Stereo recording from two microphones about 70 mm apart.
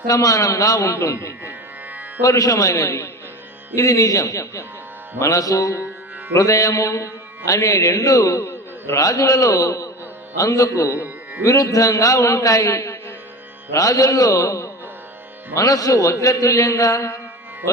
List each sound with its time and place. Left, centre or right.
0.1 s music: left
1.5 s music: right
2.2 s music: left